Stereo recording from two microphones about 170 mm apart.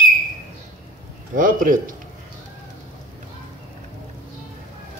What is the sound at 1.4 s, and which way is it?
Speech, 50° right (ahead or behind).